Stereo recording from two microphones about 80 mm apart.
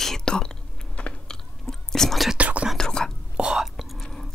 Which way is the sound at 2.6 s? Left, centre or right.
Centre.